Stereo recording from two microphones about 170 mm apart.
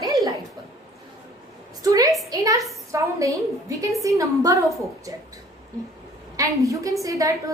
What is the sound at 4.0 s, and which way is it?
A woman's voice, 20° right (ahead or behind).